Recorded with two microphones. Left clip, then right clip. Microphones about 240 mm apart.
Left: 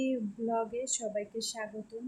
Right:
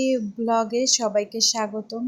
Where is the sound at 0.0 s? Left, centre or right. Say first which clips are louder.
Right 10 dB; right.